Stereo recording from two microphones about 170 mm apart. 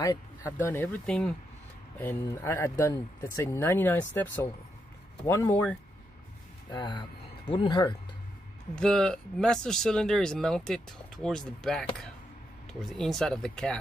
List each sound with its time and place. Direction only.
0.0 s speech: 20° left (ahead or behind)
6.7 s speech: 25° left (ahead or behind)
8.7 s speech: 5° left (ahead or behind)